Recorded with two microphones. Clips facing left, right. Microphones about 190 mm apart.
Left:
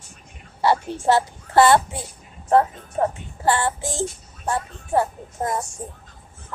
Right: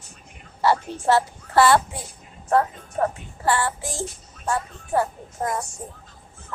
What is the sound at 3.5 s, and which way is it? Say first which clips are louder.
Child singing: left 2 dB; 25° left (ahead or behind).